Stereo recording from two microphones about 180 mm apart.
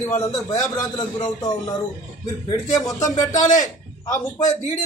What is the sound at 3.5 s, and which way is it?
A man's voice, 20° left (ahead or behind).